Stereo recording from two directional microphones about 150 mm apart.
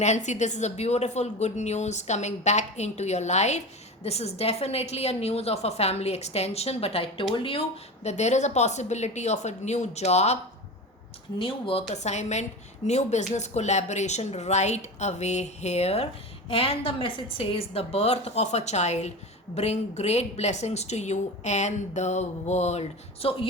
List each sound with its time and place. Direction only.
0.0 s a woman's voice: 50° left (ahead or behind)
8.0 s a woman's voice: 50° left (ahead or behind)
11.3 s a woman's voice: 35° left (ahead or behind)